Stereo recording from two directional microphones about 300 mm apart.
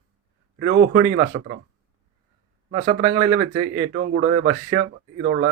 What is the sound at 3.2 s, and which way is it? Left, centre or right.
Speech, centre.